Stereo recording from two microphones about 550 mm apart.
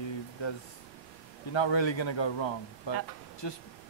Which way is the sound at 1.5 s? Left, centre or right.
Left.